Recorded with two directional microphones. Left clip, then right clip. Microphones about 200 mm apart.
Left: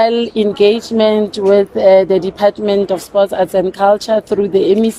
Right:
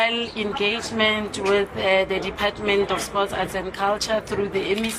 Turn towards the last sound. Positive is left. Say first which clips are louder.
# left 12 dB
turn(degrees=55)  # may be behind; listen again after turning